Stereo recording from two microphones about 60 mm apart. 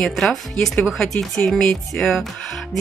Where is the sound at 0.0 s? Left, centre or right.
Centre.